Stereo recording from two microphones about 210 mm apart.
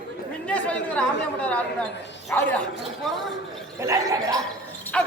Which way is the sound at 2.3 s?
5° left (ahead or behind).